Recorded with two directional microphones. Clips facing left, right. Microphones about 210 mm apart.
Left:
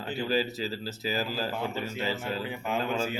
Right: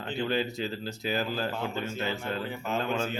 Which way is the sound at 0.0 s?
5° left (ahead or behind).